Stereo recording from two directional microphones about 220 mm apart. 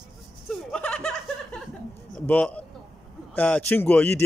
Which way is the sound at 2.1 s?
5° left (ahead or behind).